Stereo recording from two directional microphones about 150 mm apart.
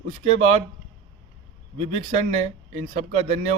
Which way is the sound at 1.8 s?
50° right (ahead or behind).